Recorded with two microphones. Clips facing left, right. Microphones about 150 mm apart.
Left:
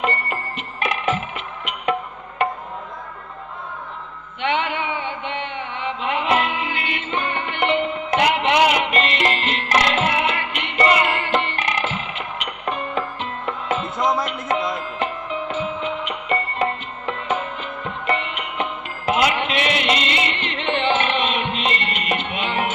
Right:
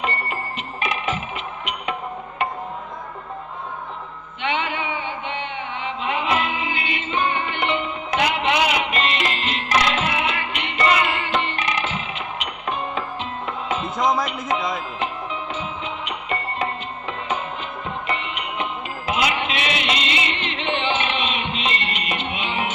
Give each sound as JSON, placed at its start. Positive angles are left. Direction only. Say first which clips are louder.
{"t": 0.0, "sound": "music", "louder": "left 2 dB", "side_deg": 50}
{"t": 6.3, "sound": "music", "louder": "left 2 dB", "side_deg": 55}
{"t": 14.0, "sound": "music", "louder": "right 1 dB", "side_deg": 5}
{"t": 14.9, "sound": "music", "louder": "left 2 dB", "side_deg": 50}